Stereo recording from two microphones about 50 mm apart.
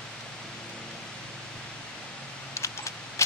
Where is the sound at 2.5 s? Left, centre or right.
Left.